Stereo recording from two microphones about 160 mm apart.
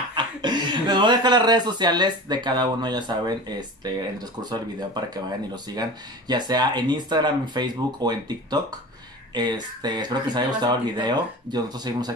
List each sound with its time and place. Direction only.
0.1 s speech: 25° right (ahead or behind)